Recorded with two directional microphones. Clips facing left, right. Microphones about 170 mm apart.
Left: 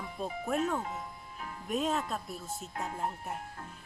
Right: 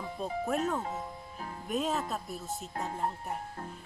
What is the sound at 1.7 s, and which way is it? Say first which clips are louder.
Speech: even; centre (ahead or behind).